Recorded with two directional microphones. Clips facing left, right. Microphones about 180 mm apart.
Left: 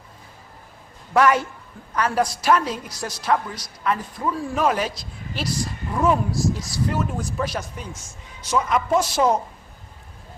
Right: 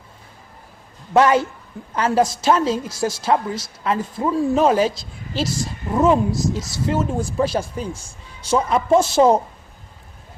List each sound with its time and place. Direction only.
1.1 s a woman's voice: 25° right (ahead or behind)